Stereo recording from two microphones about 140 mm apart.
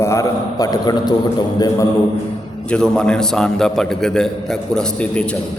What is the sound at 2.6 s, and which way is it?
A man's voice, 5° left (ahead or behind).